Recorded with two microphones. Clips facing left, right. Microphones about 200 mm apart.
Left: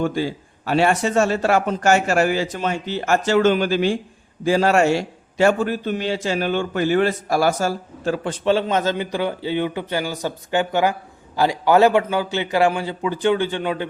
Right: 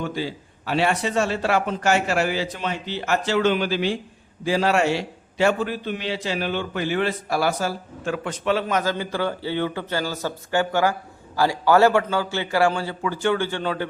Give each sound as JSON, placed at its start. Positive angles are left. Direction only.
{"t": 0.0, "sound": "a man's voice", "side_deg": 50}